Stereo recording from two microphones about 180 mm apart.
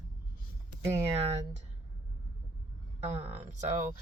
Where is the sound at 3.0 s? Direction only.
35° right (ahead or behind).